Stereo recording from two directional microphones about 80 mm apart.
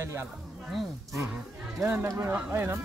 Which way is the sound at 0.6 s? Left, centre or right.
Centre.